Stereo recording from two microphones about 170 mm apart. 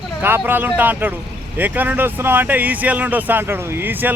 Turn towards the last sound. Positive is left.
turn(degrees=-10)  # may be behind; listen again after turning